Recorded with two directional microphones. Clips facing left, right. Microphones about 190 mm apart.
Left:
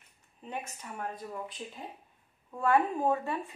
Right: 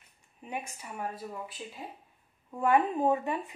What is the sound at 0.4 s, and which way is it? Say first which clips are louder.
Speech: right 1 dB; 10° right (ahead or behind).